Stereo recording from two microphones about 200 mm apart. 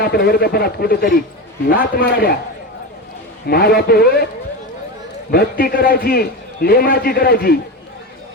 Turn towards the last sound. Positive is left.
turn(degrees=50)  # may be behind; listen again after turning